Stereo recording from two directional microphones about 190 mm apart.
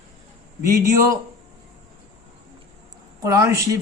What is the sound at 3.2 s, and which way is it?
Speech, 15° right (ahead or behind).